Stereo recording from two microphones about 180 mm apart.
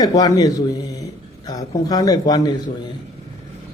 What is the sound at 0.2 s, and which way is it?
A man's voice, 20° left (ahead or behind).